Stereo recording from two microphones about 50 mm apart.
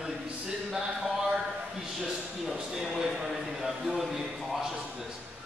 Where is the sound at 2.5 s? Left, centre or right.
Centre.